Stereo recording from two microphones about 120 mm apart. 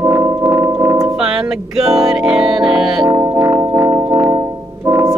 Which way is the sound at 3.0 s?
25° right (ahead or behind).